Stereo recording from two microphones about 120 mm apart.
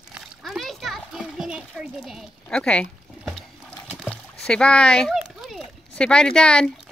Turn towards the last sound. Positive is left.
turn(degrees=5)  # may be behind; listen again after turning